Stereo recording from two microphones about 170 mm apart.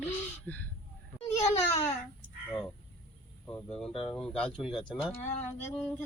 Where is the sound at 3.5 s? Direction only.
5° left (ahead or behind).